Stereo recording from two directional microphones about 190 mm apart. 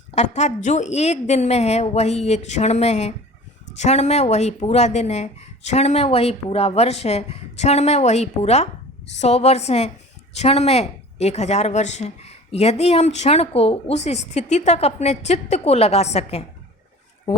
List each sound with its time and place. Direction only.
0.1 s a woman's voice: 35° left (ahead or behind)